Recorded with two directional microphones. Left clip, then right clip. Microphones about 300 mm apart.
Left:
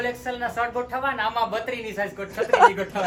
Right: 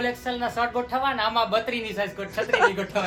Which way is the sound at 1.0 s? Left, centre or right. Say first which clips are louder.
Left 1 dB; right.